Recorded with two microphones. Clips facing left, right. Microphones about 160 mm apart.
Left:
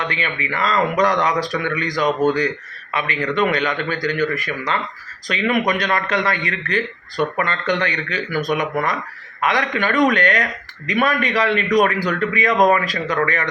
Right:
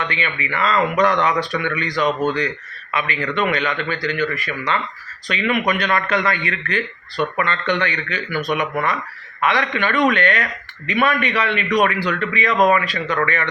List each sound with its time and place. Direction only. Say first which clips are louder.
0.0 s a man's voice: even; 40° left (ahead or behind)